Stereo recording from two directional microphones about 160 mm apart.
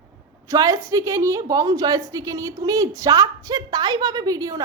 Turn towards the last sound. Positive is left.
turn(degrees=-20)  # may be behind; listen again after turning